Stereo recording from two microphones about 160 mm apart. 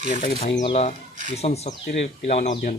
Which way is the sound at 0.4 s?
40° left (ahead or behind).